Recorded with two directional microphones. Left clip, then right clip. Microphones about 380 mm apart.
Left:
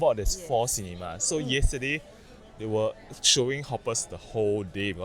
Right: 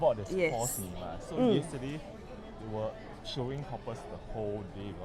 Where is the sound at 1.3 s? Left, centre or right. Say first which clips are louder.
Even; left.